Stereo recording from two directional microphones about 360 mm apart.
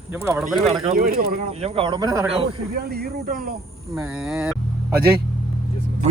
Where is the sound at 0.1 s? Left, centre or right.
Centre.